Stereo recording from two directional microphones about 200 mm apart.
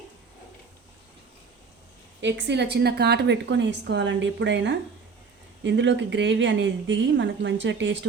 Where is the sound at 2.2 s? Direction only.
60° right (ahead or behind).